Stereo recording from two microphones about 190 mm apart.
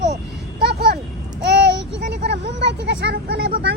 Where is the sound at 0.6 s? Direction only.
55° right (ahead or behind).